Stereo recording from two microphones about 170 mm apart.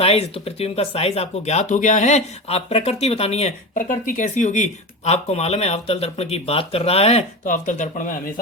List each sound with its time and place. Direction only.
0.0 s speech: 35° left (ahead or behind)
3.8 s speech: 55° left (ahead or behind)